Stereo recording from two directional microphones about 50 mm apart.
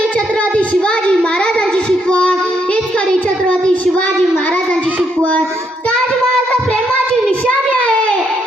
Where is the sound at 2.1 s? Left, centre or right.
Left.